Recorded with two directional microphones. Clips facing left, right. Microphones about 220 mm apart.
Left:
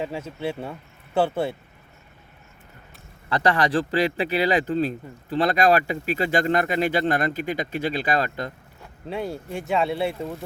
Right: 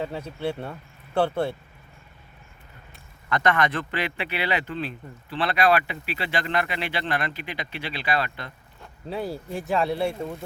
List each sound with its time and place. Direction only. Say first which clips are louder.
0.0 s speech: even; 5° left (ahead or behind)
3.2 s speech: left 1 dB; 30° left (ahead or behind)
9.0 s speech: left 1 dB; centre (ahead or behind)